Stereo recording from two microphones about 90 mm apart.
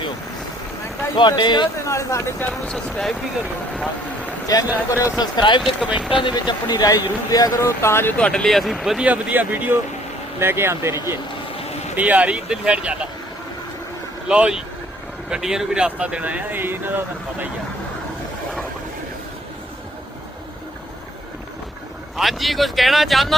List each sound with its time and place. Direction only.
1.1 s speech: 55° left (ahead or behind)
1.8 s speech: 35° left (ahead or behind)
2.5 s speech: 5° left (ahead or behind)
4.5 s speech: 40° left (ahead or behind)
5.2 s speech: 60° left (ahead or behind)
5.8 s speech: 10° right (ahead or behind)
6.1 s speech: 60° left (ahead or behind); by 8.1 s 30° left (ahead or behind)
8.2 s speech: 10° left (ahead or behind)
9.0 s speech: 20° right (ahead or behind)
11.9 s speech: 15° right (ahead or behind)
14.3 s speech: 10° right (ahead or behind)
22.1 s speech: centre (ahead or behind)